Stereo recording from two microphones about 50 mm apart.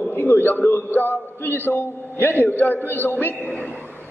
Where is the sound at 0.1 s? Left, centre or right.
Left.